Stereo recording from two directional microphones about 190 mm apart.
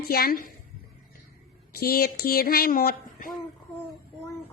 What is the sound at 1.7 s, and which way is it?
Speech, 55° left (ahead or behind).